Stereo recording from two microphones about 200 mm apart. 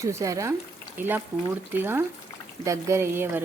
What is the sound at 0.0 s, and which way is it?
Speech, 15° right (ahead or behind).